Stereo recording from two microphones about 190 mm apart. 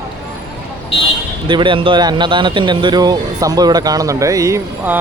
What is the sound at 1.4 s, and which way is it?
Speech, 25° right (ahead or behind).